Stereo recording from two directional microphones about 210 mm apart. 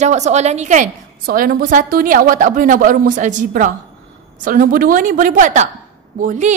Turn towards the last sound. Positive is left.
turn(degrees=-35)  # may be behind; listen again after turning